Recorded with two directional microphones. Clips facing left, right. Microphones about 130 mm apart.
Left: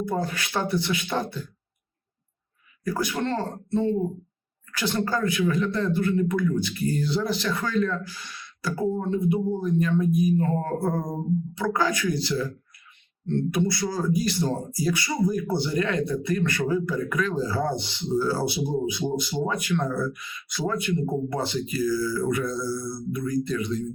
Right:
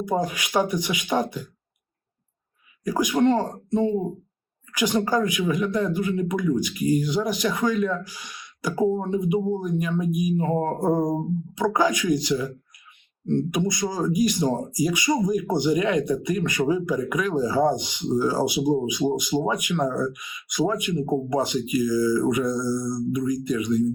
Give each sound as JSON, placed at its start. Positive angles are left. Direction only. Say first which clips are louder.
{"t": 0.0, "sound": "speech", "louder": "right 3 dB", "side_deg": -15}
{"t": 2.8, "sound": "speech", "louder": "right 7 dB", "side_deg": -15}